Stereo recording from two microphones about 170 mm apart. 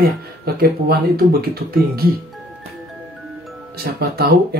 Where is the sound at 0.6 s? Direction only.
65° right (ahead or behind).